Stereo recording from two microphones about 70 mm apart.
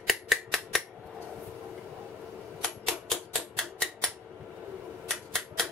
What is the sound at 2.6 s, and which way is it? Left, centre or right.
Typewriter, centre.